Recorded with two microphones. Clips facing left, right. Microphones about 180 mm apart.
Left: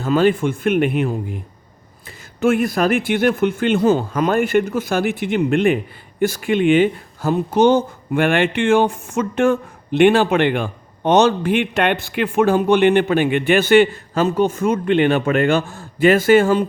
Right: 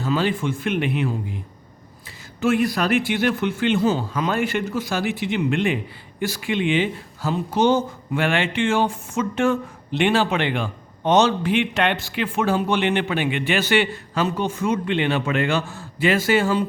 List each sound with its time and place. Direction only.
0.0 s speech: 50° left (ahead or behind)